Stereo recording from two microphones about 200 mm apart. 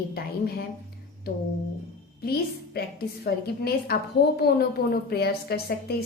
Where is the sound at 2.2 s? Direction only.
50° left (ahead or behind).